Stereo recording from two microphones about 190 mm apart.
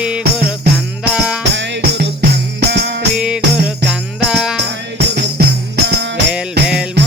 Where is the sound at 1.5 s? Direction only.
65° right (ahead or behind).